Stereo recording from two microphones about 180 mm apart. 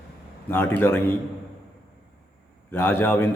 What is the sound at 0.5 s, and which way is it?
Speech, 10° left (ahead or behind).